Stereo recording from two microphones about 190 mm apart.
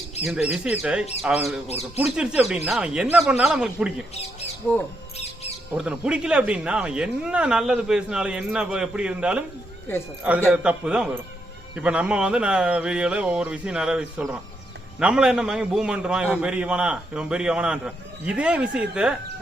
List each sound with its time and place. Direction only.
0.3 s a man's voice: 5° right (ahead or behind)
4.1 s speech: 35° left (ahead or behind)
4.6 s a man's voice: 5° right (ahead or behind)
5.1 s bird: 35° left (ahead or behind)
5.7 s a man's voice: 5° right (ahead or behind)
10.5 s a man's voice: 5° right (ahead or behind)